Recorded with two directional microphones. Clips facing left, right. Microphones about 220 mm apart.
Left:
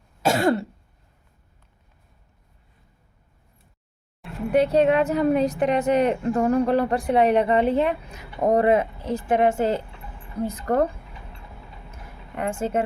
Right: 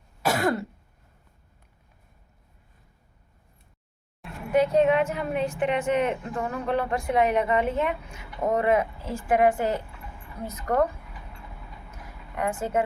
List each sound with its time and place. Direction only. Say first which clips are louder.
0.2 s cough: left 4 dB; 25° left (ahead or behind)
4.5 s speech: left 2 dB; 35° left (ahead or behind)
9.0 s a woman's voice: left 2 dB; 20° left (ahead or behind)
12.4 s a woman's voice: left 2 dB; 25° left (ahead or behind)